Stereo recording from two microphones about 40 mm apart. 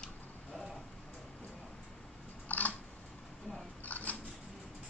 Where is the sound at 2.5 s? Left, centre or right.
Left.